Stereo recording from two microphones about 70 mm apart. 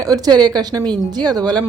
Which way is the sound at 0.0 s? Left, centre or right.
Right.